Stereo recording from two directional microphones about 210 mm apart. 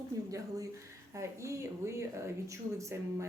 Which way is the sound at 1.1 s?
15° right (ahead or behind).